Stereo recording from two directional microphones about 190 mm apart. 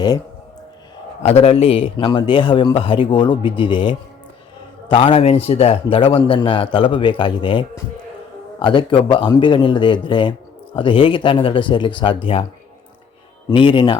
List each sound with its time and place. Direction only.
1.3 s speech: 35° left (ahead or behind)
13.5 s speech: 25° left (ahead or behind)